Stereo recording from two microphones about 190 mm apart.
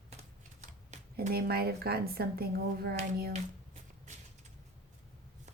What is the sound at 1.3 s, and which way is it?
Speech, 55° right (ahead or behind).